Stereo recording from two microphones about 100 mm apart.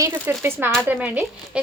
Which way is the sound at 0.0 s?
25° right (ahead or behind).